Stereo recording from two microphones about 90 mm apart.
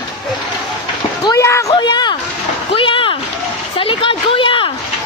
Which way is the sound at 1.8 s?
55° left (ahead or behind).